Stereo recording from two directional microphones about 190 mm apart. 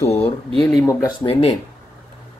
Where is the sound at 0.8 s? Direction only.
15° left (ahead or behind).